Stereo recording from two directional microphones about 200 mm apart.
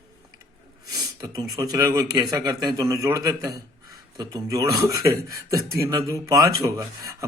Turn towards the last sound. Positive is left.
turn(degrees=-15)  # may be behind; listen again after turning